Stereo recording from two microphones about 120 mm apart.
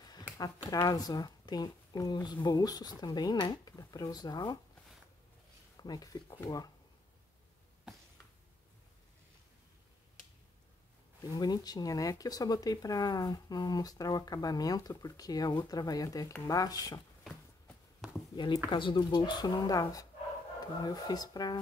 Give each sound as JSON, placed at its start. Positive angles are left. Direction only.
{"t": 0.0, "sound": "a sound", "side_deg": 35}
{"t": 0.7, "sound": "speech", "side_deg": 30}
{"t": 5.8, "sound": "speech", "side_deg": 35}
{"t": 11.1, "sound": "speech", "side_deg": 30}
{"t": 17.2, "sound": "a sound", "side_deg": 10}
{"t": 18.3, "sound": "speech", "side_deg": 40}